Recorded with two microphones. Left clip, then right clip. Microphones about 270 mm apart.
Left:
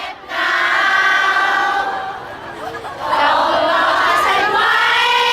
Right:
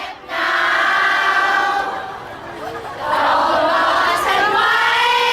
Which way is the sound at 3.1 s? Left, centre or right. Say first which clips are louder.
Left 1 dB; centre.